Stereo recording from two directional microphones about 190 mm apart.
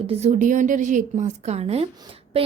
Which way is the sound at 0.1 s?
35° right (ahead or behind).